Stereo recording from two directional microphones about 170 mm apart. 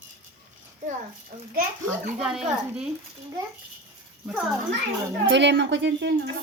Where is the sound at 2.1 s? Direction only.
5° right (ahead or behind).